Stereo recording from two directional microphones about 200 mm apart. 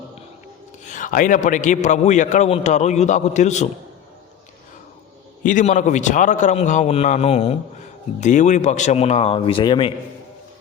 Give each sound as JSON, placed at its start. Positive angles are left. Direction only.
{"t": 0.9, "sound": "a man's voice", "side_deg": 40}
{"t": 5.4, "sound": "a man's voice", "side_deg": 40}